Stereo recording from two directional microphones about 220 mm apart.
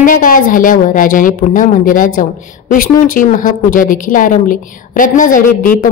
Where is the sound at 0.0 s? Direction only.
40° left (ahead or behind).